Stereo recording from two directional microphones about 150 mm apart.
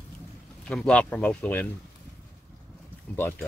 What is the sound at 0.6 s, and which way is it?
Speech, 5° left (ahead or behind).